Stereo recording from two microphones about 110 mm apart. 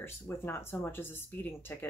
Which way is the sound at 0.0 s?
20° left (ahead or behind).